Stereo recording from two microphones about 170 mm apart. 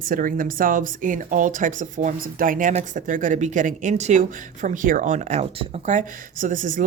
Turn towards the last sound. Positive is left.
turn(degrees=-50)  # may be behind; listen again after turning